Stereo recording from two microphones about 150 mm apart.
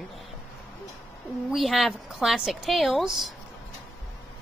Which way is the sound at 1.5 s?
Centre (ahead or behind).